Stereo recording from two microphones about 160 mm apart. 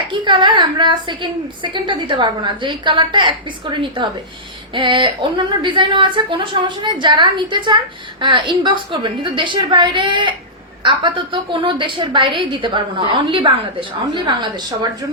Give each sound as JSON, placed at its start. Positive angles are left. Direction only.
{"t": 0.1, "sound": "a woman's voice", "side_deg": -30}